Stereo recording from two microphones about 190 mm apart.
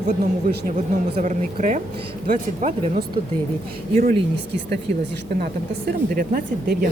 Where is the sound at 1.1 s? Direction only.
40° right (ahead or behind).